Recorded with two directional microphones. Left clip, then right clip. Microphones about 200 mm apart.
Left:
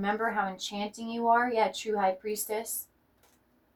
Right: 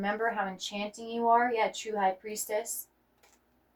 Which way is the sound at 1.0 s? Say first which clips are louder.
Even; 30° left (ahead or behind).